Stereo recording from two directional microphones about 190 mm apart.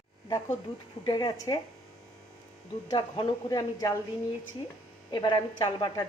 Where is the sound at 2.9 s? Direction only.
20° left (ahead or behind).